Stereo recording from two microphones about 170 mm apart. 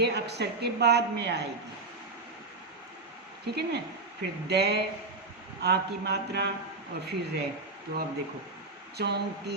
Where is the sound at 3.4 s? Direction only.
75° right (ahead or behind).